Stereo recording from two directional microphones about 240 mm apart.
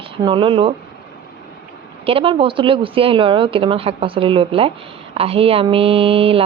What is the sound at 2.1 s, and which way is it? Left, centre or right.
Speech, right.